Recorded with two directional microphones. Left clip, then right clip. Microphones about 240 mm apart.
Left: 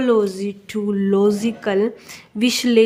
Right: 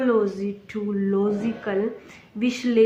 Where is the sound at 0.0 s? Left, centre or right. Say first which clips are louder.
Left 4 dB; left.